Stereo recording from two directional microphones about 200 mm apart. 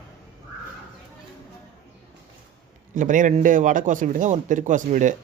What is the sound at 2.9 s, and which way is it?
Speech, 40° right (ahead or behind).